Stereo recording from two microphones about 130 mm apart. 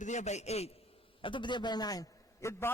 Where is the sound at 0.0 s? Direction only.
65° left (ahead or behind).